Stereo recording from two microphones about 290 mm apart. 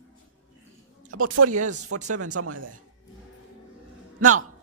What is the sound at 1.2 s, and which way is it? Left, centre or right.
Speech, right.